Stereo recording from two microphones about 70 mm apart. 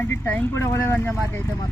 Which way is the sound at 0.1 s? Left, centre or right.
Left.